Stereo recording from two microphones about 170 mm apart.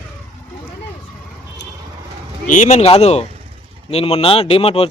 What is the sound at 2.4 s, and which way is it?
Speech, 50° left (ahead or behind).